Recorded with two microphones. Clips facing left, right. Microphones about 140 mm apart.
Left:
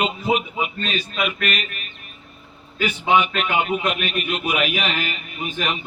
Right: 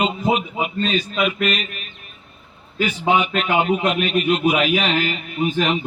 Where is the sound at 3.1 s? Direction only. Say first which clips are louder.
Right 1 dB; 35° right (ahead or behind).